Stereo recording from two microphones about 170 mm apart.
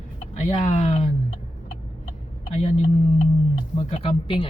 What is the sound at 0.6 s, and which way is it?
Speech, 45° left (ahead or behind).